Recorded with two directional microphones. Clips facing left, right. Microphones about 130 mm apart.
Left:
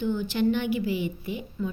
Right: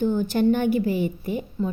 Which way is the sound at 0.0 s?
45° right (ahead or behind).